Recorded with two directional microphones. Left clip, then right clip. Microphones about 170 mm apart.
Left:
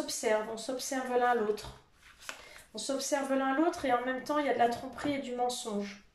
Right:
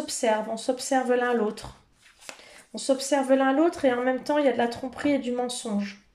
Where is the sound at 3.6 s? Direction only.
55° right (ahead or behind).